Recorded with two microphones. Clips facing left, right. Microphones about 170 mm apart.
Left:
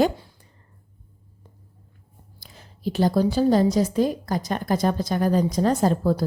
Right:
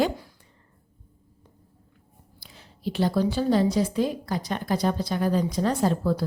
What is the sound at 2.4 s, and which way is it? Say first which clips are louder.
A woman's voice: left 3 dB; 45° left (ahead or behind).